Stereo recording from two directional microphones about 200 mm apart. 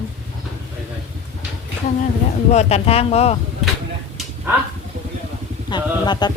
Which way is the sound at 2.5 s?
30° left (ahead or behind).